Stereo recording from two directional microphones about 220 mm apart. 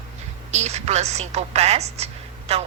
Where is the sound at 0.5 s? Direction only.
30° right (ahead or behind).